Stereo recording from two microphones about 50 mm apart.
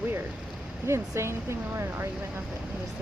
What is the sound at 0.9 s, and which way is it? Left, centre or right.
Speech, right.